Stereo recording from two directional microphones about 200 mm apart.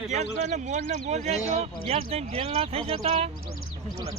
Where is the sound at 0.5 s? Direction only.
35° right (ahead or behind).